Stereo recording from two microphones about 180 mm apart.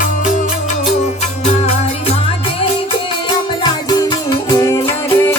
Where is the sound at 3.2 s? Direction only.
25° left (ahead or behind).